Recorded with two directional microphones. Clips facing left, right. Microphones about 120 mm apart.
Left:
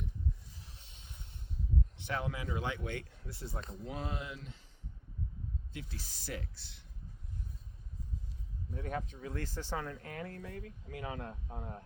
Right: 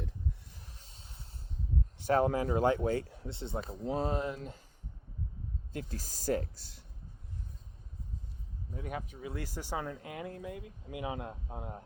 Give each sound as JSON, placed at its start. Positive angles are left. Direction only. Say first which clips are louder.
{"t": 0.8, "sound": "a sound", "louder": "right 1 dB", "side_deg": -40}
{"t": 2.0, "sound": "speech", "louder": "right 14 dB", "side_deg": -40}
{"t": 5.7, "sound": "speech", "louder": "right 6 dB", "side_deg": -40}
{"t": 8.7, "sound": "speech", "louder": "left 1 dB", "side_deg": -10}